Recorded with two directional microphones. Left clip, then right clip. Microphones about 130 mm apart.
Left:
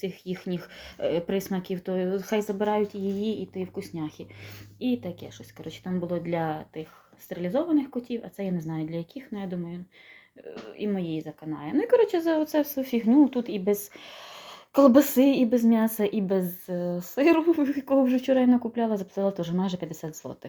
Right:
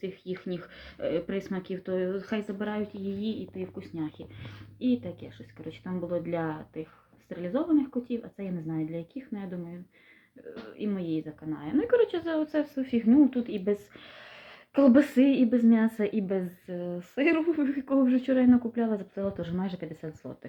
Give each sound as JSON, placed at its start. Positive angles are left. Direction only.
{"t": 0.0, "sound": "a woman's voice", "side_deg": 45}
{"t": 10.8, "sound": "a woman's voice", "side_deg": 15}